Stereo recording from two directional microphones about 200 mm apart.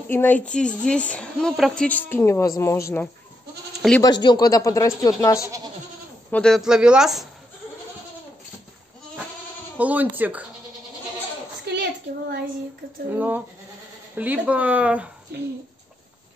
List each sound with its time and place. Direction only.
0.1 s a woman's voice: 10° left (ahead or behind)
4.0 s a woman's voice: 20° left (ahead or behind)
6.3 s speech: centre (ahead or behind)
9.8 s speech: 10° right (ahead or behind)
11.6 s a sound: 55° right (ahead or behind)
13.1 s speech: 10° right (ahead or behind)
15.3 s speech: 55° right (ahead or behind)